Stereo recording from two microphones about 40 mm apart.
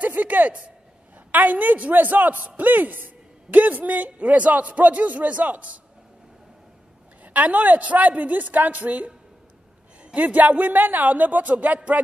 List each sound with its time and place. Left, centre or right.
0.0 s a sound: right
1.3 s a man's voice: right
7.3 s a man's voice: right
10.1 s a man's voice: right